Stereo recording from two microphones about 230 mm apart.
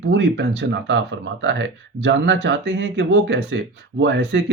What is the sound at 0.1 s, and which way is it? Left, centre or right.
Speech, right.